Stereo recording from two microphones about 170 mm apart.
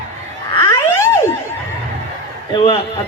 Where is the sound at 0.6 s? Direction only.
15° left (ahead or behind).